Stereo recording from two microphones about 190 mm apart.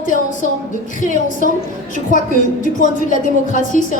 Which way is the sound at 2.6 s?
45° left (ahead or behind).